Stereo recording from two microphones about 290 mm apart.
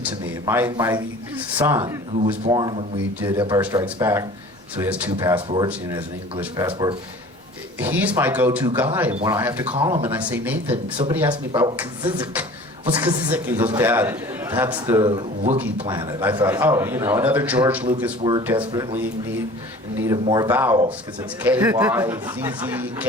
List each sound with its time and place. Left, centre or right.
0.0 s speech: centre
9.7 s speech: centre
10.1 s speech: centre
10.7 s speech: centre
20.2 s speech: centre